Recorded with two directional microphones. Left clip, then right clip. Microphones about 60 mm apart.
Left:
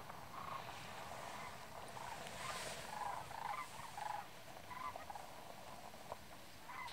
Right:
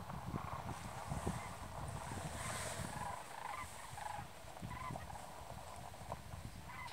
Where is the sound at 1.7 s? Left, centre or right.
Right.